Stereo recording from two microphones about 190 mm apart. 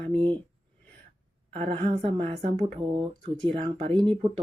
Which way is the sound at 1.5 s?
30° right (ahead or behind).